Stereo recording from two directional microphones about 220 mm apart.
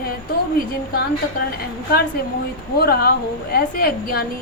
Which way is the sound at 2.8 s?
45° left (ahead or behind).